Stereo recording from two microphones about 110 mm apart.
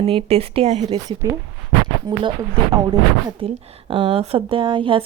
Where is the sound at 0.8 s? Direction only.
35° right (ahead or behind).